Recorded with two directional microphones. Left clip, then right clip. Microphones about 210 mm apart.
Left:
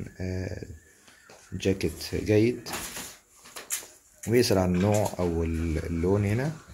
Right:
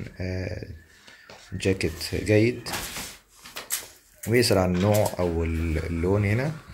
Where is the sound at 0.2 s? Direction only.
15° left (ahead or behind).